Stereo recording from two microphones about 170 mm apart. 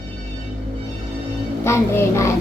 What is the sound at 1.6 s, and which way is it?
Speech, 15° left (ahead or behind).